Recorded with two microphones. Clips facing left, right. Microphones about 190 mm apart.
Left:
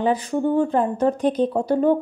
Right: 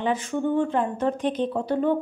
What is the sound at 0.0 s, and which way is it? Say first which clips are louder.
A woman's voice: left 4 dB; 35° left (ahead or behind).